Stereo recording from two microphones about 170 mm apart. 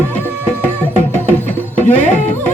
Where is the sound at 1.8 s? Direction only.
45° left (ahead or behind).